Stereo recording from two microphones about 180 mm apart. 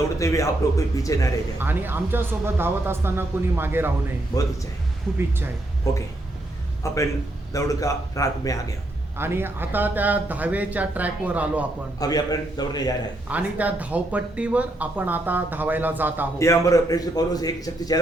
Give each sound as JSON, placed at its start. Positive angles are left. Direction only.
{"t": 0.2, "sound": "a man's voice", "side_deg": 15}
{"t": 1.5, "sound": "speech", "side_deg": -10}
{"t": 6.8, "sound": "a man's voice", "side_deg": 15}
{"t": 9.1, "sound": "speech", "side_deg": -15}
{"t": 11.9, "sound": "a man's voice", "side_deg": 20}
{"t": 13.2, "sound": "speech", "side_deg": -10}
{"t": 16.4, "sound": "a man's voice", "side_deg": 15}